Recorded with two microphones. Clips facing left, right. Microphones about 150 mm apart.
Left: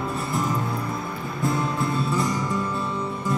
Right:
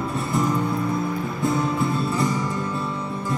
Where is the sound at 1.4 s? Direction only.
Centre (ahead or behind).